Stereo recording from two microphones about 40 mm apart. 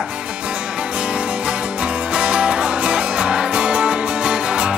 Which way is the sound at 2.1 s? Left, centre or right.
Right.